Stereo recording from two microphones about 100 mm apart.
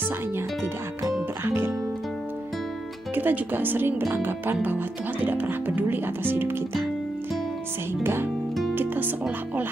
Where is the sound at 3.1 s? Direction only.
20° right (ahead or behind).